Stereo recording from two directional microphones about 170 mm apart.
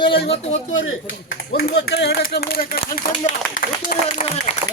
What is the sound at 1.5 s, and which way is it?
A man's voice, 70° left (ahead or behind).